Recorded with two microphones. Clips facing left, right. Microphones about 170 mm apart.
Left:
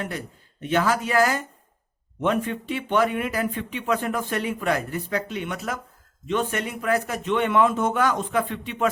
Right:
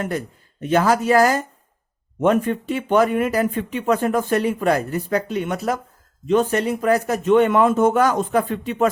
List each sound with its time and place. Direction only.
0.0 s speech: 45° right (ahead or behind)